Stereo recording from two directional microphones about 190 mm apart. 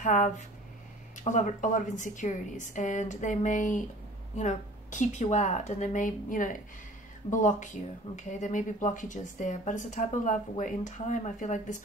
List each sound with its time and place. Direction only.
0.0 s a woman's voice: 40° left (ahead or behind)